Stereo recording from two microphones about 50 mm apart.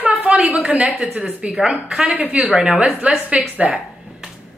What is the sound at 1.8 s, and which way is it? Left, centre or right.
Speech, centre.